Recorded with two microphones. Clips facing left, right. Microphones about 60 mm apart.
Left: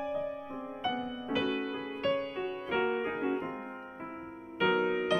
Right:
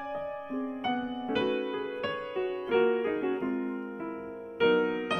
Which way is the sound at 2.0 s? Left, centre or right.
Centre.